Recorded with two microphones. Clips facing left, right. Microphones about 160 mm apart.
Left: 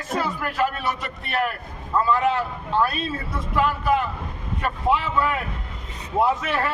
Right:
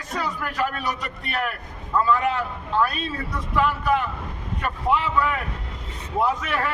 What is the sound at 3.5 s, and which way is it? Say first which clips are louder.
A man's voice: left 1 dB; centre (ahead or behind).